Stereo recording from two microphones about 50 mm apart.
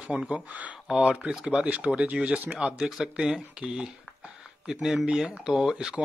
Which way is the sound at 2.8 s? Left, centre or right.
Centre.